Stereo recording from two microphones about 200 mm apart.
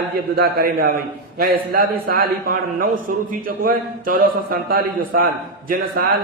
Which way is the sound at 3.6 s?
45° right (ahead or behind).